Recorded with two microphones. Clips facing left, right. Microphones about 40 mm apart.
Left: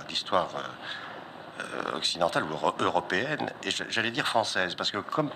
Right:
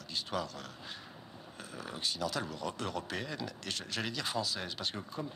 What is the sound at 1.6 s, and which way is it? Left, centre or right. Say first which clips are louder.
Speech: left 9 dB; left.